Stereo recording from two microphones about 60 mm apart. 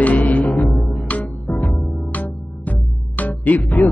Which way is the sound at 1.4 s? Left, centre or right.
Left.